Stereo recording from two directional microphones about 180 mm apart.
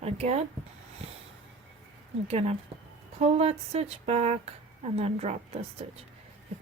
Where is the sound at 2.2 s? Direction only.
35° right (ahead or behind).